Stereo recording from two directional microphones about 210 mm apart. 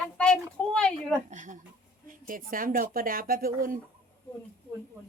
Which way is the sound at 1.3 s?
35° right (ahead or behind).